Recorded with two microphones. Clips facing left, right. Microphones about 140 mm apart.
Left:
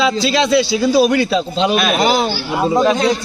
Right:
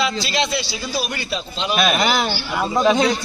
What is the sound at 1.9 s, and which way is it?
Speech, 25° left (ahead or behind).